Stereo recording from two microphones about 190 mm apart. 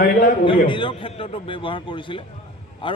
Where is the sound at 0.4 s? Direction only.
25° left (ahead or behind).